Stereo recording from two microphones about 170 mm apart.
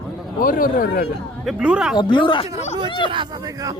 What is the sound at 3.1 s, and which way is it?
Speech, 30° right (ahead or behind).